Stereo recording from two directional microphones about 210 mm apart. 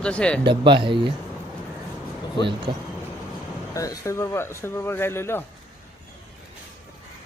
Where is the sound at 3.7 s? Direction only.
15° left (ahead or behind).